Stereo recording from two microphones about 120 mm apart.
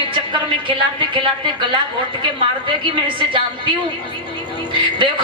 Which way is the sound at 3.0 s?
45° right (ahead or behind).